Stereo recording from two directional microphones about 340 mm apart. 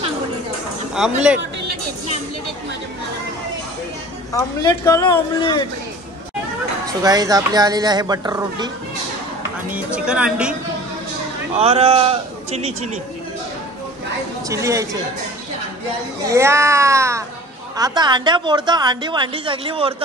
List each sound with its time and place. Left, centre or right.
0.9 s speech: centre
4.3 s speech: centre
6.9 s a woman's voice: centre
9.7 s speech: centre
11.5 s a woman's voice: centre
14.5 s a woman's voice: centre
16.3 s a woman's voice: centre